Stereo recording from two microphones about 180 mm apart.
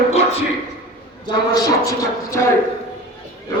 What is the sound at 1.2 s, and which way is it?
A man's voice, 20° left (ahead or behind).